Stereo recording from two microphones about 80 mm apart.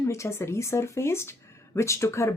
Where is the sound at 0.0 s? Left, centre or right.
Left.